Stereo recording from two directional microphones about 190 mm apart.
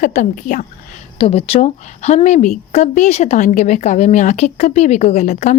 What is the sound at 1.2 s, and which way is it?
Speech, 30° left (ahead or behind).